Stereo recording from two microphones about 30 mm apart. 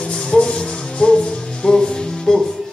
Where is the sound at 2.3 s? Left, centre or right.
Left.